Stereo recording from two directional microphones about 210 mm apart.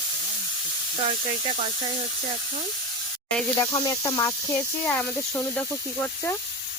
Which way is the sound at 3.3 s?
15° left (ahead or behind).